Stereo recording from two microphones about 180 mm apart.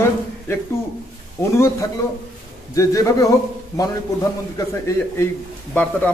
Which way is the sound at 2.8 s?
20° left (ahead or behind).